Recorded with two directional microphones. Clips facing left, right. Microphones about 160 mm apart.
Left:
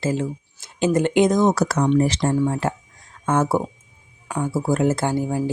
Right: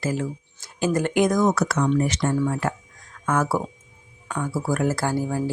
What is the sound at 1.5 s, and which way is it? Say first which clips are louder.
Speech: left 3 dB; 35° left (ahead or behind).